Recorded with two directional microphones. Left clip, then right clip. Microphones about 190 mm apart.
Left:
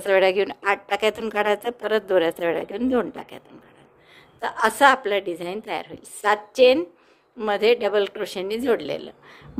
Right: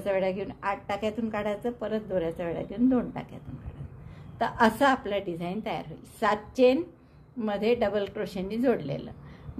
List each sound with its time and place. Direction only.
0.0 s a woman's voice: 45° left (ahead or behind)
4.4 s a woman's voice: 30° left (ahead or behind)